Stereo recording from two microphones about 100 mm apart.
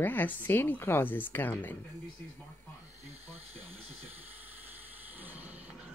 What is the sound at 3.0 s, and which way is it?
Snake, 90° right.